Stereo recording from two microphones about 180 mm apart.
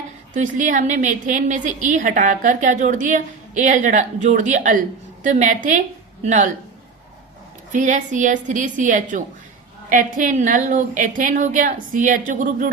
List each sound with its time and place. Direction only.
0.3 s a woman's voice: 45° right (ahead or behind)
7.7 s a woman's voice: 45° right (ahead or behind)